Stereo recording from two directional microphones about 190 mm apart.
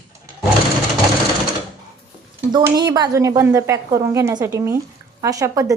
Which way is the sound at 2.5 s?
20° right (ahead or behind).